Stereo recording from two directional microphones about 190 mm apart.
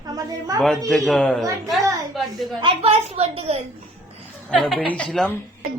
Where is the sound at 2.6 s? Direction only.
30° right (ahead or behind).